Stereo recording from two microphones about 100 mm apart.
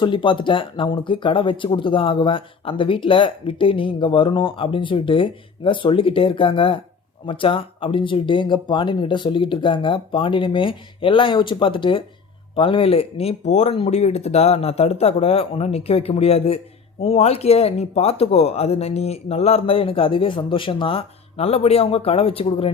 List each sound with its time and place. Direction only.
0.0 s speech: 55° left (ahead or behind)